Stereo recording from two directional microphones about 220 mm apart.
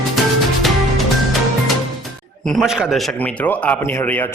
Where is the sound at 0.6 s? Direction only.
Centre (ahead or behind).